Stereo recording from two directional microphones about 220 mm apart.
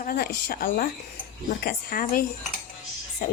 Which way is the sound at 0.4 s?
40° left (ahead or behind).